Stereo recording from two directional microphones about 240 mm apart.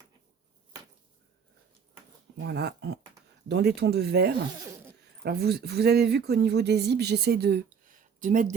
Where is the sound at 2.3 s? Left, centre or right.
Right.